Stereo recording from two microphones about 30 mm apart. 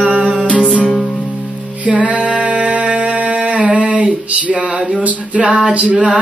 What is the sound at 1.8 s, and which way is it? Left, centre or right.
Music, right.